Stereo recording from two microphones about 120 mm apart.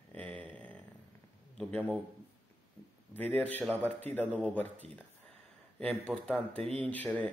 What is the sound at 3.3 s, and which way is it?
Speech, 15° left (ahead or behind).